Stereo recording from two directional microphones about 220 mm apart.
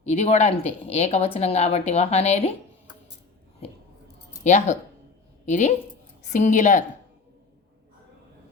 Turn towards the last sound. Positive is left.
turn(degrees=35)  # may be behind; listen again after turning